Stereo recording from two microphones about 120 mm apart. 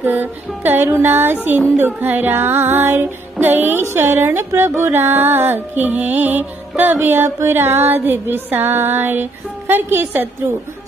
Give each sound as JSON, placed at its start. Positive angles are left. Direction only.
{"t": 0.0, "sound": "music", "side_deg": -15}